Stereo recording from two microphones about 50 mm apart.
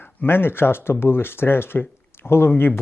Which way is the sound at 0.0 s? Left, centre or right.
Left.